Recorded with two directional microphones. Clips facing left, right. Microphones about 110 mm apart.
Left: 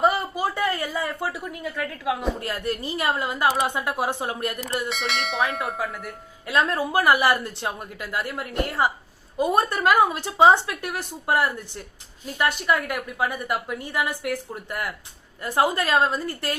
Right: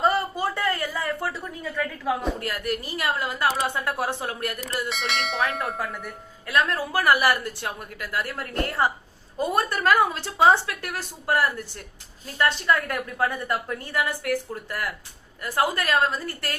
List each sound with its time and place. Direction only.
0.0 s speech: 15° left (ahead or behind)
2.4 s a woman's voice: 25° left (ahead or behind)
4.9 s speech: centre (ahead or behind)
6.5 s a woman's voice: 20° left (ahead or behind)